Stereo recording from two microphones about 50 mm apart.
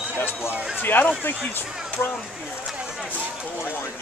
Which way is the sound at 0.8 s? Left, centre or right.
Left.